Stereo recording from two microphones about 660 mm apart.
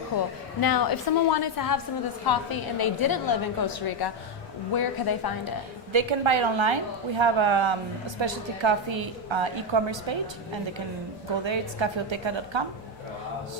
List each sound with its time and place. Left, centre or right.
0.1 s a woman's voice: left
5.9 s a woman's voice: right
11.4 s a woman's voice: right